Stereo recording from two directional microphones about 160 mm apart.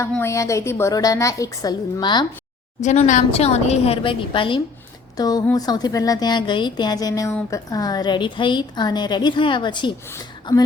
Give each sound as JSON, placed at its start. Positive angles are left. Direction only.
{"t": 0.2, "sound": "a woman's voice", "side_deg": 20}
{"t": 2.8, "sound": "a woman's voice", "side_deg": 45}